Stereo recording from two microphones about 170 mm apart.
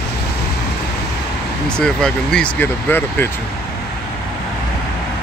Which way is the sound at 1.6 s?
5° left (ahead or behind).